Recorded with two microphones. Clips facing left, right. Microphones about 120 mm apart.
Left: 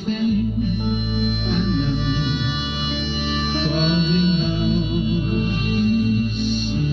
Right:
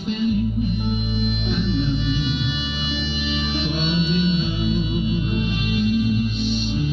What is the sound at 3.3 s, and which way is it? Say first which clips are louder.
Music: left 3 dB; 45° left (ahead or behind).